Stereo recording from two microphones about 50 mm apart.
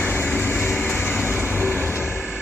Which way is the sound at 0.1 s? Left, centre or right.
Left.